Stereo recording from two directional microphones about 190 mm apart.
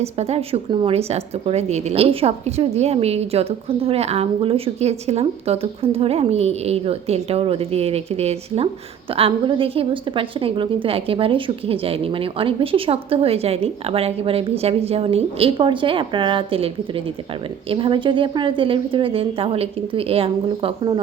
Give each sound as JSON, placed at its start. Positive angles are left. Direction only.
{"t": 0.0, "sound": "a woman's voice", "side_deg": -35}